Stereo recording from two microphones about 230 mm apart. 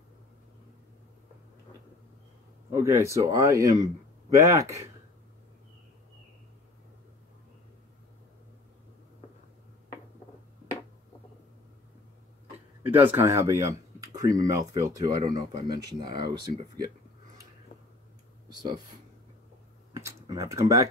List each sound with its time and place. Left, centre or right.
2.7 s speech: centre
12.8 s speech: centre
18.5 s speech: centre
19.9 s a sound: centre